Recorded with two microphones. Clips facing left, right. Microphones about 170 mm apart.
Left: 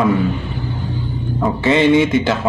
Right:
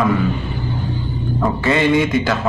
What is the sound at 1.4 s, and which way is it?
Speech, 20° left (ahead or behind).